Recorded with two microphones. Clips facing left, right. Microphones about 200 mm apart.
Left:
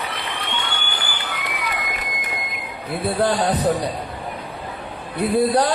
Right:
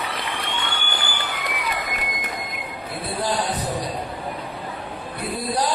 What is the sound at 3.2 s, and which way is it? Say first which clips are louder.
Speech: left 5 dB; 60° left (ahead or behind).